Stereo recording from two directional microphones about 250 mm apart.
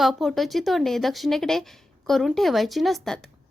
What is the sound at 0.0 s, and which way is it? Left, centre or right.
A woman's voice, centre.